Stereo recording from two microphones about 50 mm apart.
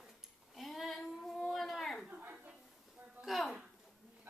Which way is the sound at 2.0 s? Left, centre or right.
Right.